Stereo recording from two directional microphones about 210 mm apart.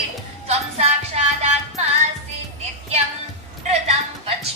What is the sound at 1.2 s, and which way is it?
Music, 30° right (ahead or behind).